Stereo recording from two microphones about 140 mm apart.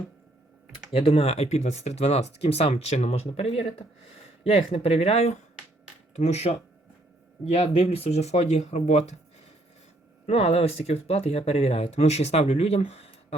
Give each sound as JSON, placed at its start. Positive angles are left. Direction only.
{"t": 0.9, "sound": "speech", "side_deg": 45}
{"t": 10.2, "sound": "speech", "side_deg": 50}